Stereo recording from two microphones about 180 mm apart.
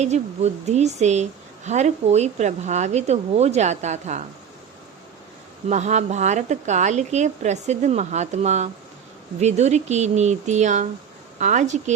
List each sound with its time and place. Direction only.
0.0 s speech: 40° right (ahead or behind)
5.6 s speech: 40° right (ahead or behind)